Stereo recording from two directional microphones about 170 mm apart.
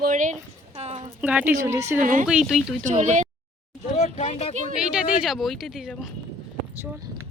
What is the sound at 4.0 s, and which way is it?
Speech, 40° left (ahead or behind).